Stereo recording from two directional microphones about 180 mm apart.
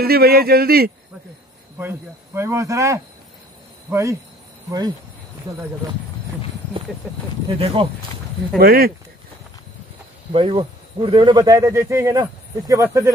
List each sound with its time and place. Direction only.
0.0 s speech: 60° right (ahead or behind)
1.8 s speech: 15° right (ahead or behind)
7.0 s speech: 10° right (ahead or behind)
7.5 s speech: 30° right (ahead or behind)
8.5 s speech: 55° right (ahead or behind)
10.3 s speech: 30° right (ahead or behind)